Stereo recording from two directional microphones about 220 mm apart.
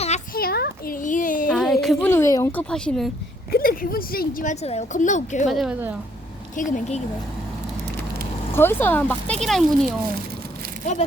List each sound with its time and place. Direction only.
0.3 s a sound: 45° left (ahead or behind)
1.5 s a sound: centre (ahead or behind)
3.5 s a woman's voice: 40° left (ahead or behind)
5.5 s speech: centre (ahead or behind)
6.6 s a woman's voice: 35° left (ahead or behind)
8.5 s speech: 10° left (ahead or behind)